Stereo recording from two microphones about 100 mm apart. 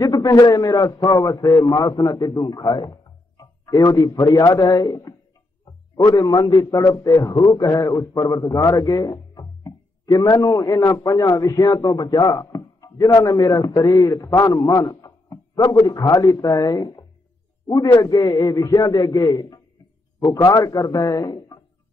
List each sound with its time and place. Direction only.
0.0 s a sound: 40° left (ahead or behind)
0.4 s a man's voice: 40° left (ahead or behind)
8.3 s music: 40° left (ahead or behind)
10.1 s a man's voice: 35° left (ahead or behind)
15.6 s a man's voice: 55° left (ahead or behind)
15.9 s a man's voice: 35° left (ahead or behind)